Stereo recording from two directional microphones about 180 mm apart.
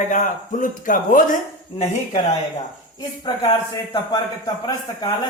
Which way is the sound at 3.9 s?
25° left (ahead or behind).